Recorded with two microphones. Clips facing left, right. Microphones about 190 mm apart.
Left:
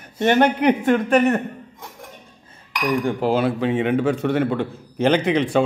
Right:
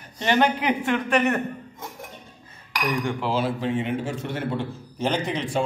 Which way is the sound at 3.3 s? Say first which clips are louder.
Left 5 dB; 60° left (ahead or behind).